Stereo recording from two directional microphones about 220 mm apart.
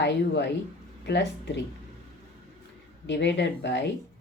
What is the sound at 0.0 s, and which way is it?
Speech, 50° left (ahead or behind).